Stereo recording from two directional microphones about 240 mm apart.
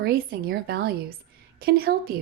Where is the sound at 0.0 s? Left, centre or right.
Right.